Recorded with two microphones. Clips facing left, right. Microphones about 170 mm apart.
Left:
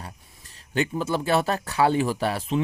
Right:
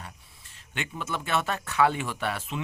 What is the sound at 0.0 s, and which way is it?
Speech, 40° left (ahead or behind).